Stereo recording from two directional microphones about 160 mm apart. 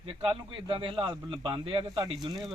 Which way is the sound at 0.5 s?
35° right (ahead or behind).